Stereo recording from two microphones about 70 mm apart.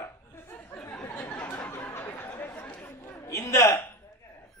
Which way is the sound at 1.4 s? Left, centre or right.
Left.